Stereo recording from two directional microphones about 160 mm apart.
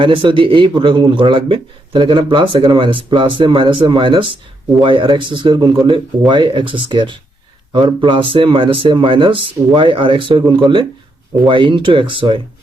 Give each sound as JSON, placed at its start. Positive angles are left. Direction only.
{"t": 0.0, "sound": "speech", "side_deg": -30}